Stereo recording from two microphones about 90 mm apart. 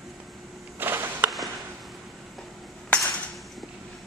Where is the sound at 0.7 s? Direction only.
25° right (ahead or behind).